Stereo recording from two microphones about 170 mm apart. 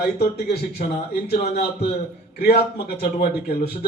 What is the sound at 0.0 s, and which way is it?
Speech, 70° left (ahead or behind).